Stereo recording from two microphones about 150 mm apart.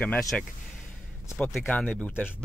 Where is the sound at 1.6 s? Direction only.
10° left (ahead or behind).